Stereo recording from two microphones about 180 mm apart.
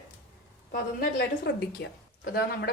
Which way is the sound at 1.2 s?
65° left (ahead or behind).